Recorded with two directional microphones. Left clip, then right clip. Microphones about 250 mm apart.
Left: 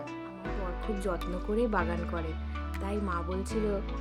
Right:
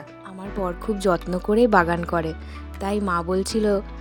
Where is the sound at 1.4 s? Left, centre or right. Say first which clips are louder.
Right 13 dB; right.